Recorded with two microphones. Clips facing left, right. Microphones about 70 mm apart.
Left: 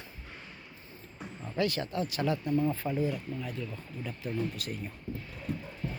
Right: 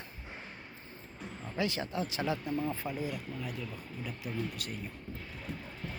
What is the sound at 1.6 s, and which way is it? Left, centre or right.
Speech, centre.